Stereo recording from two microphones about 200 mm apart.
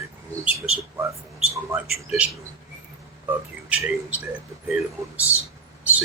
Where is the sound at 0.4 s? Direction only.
5° right (ahead or behind).